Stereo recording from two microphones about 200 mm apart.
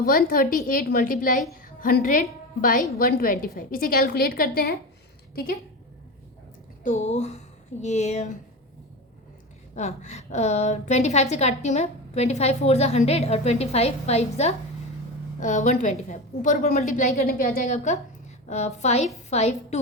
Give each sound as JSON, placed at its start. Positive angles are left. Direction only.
{"t": 0.0, "sound": "a woman's voice", "side_deg": 45}
{"t": 6.8, "sound": "a woman's voice", "side_deg": 35}
{"t": 9.7, "sound": "a woman's voice", "side_deg": 35}